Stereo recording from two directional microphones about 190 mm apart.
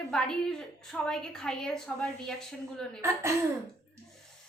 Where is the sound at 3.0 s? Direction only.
15° right (ahead or behind).